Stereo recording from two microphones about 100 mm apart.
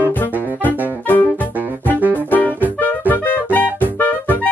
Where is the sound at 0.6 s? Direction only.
20° left (ahead or behind).